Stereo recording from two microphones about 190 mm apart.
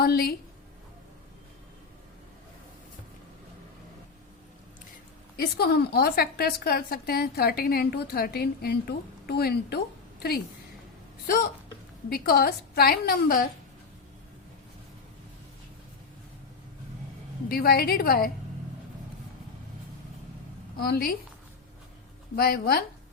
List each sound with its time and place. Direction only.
0.0 s a woman's voice: 55° left (ahead or behind)
5.5 s a woman's voice: 60° left (ahead or behind)
12.0 s a woman's voice: 55° left (ahead or behind)
17.5 s a woman's voice: 55° left (ahead or behind)
20.7 s a woman's voice: 55° left (ahead or behind)
22.4 s a woman's voice: 55° left (ahead or behind)